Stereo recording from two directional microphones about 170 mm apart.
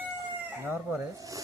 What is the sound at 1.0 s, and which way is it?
Speech, 20° right (ahead or behind).